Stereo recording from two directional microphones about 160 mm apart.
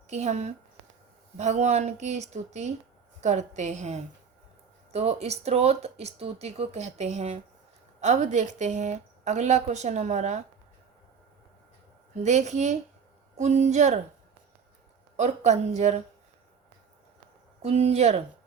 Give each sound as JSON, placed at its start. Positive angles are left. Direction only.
{"t": 0.1, "sound": "a woman's voice", "side_deg": -45}
{"t": 12.1, "sound": "a woman's voice", "side_deg": -45}
{"t": 15.1, "sound": "a woman's voice", "side_deg": -45}
{"t": 17.6, "sound": "speech", "side_deg": -40}